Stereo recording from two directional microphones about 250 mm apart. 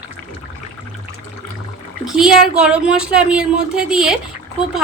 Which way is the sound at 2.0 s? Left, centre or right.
Centre.